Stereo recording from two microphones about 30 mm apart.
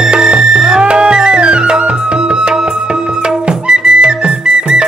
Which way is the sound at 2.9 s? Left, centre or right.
Right.